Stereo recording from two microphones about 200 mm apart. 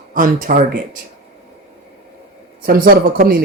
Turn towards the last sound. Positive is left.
turn(degrees=-45)  # may be behind; listen again after turning